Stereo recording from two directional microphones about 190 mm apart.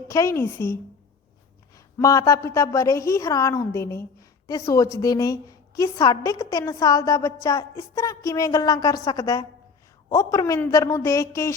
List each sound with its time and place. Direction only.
0.1 s a woman's voice: 15° left (ahead or behind)